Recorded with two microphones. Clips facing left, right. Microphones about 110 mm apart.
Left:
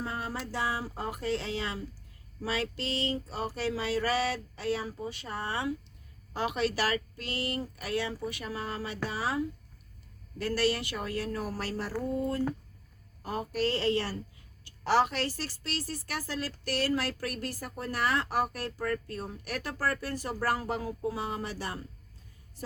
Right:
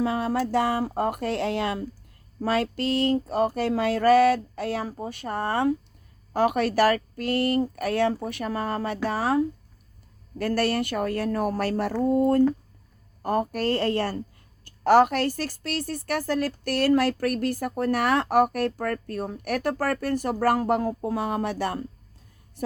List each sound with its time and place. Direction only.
0.0 s speech: 70° right (ahead or behind)
0.3 s speech: 60° right (ahead or behind)
2.4 s a sound: 50° right (ahead or behind)
10.3 s speech: 55° right (ahead or behind)
13.2 s a sound: 55° right (ahead or behind)
16.6 s speech: 55° right (ahead or behind)